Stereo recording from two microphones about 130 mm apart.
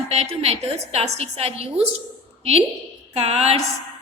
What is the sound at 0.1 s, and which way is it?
A woman's voice, 50° right (ahead or behind).